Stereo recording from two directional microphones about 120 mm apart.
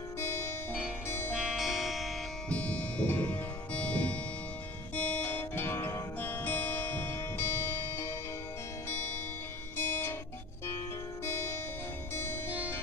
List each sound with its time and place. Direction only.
0.2 s music: 20° left (ahead or behind)
1.4 s music: centre (ahead or behind)
2.5 s music: 10° left (ahead or behind)
9.8 s music: 15° left (ahead or behind)
11.2 s music: 20° left (ahead or behind)